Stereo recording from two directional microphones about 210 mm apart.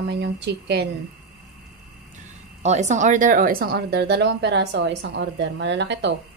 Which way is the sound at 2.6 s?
35° right (ahead or behind).